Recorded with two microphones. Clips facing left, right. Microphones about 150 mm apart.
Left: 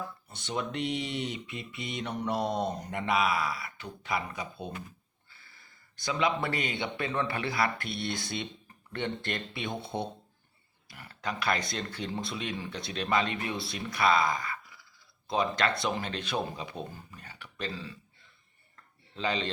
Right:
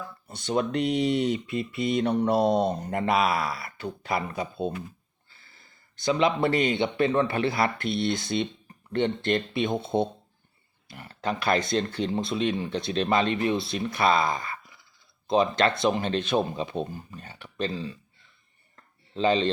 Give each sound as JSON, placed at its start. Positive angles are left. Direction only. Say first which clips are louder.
{"t": 0.3, "sound": "speech", "louder": "right 9 dB", "side_deg": -40}
{"t": 6.0, "sound": "speech", "louder": "right 6 dB", "side_deg": -25}
{"t": 19.1, "sound": "speech", "louder": "right 9 dB", "side_deg": -25}